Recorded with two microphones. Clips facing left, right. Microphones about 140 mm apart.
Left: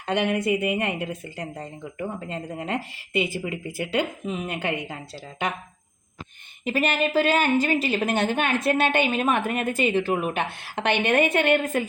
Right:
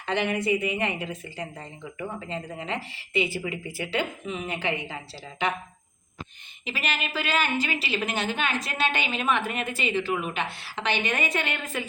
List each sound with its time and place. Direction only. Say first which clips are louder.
0.0 s speech: left 3 dB; 50° left (ahead or behind)
6.7 s speech: left 8 dB; 50° left (ahead or behind)